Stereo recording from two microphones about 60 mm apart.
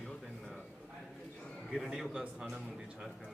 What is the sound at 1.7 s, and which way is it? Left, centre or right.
Speech, centre.